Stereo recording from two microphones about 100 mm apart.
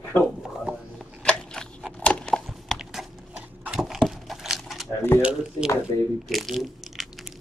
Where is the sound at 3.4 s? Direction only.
10° right (ahead or behind).